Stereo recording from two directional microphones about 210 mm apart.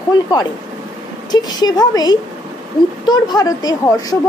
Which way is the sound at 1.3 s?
20° left (ahead or behind).